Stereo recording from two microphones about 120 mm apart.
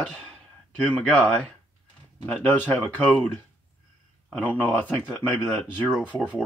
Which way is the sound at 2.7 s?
10° left (ahead or behind).